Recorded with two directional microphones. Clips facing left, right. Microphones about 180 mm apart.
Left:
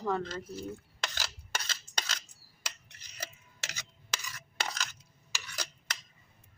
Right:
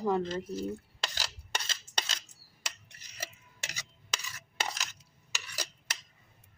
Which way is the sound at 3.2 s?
15° right (ahead or behind).